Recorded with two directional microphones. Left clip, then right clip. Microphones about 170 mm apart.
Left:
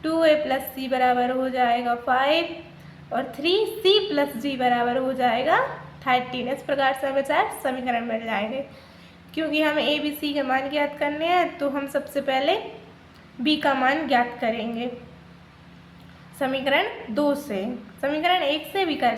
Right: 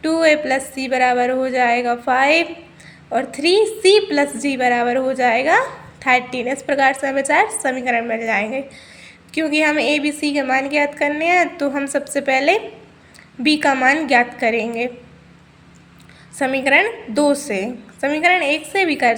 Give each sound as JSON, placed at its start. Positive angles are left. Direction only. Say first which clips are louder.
{"t": 0.0, "sound": "a woman's voice", "louder": "right 4 dB", "side_deg": -30}
{"t": 16.4, "sound": "a woman's voice", "louder": "right 7 dB", "side_deg": -30}